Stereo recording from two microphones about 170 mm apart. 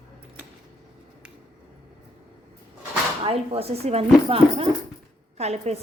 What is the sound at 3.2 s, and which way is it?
Speech, 35° right (ahead or behind).